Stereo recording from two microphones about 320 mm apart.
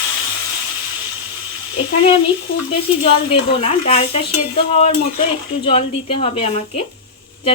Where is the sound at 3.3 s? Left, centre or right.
Centre.